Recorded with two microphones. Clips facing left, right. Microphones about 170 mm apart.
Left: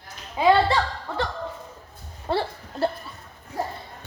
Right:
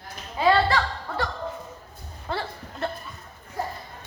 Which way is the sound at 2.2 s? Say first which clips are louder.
Left 5 dB; 30° left (ahead or behind).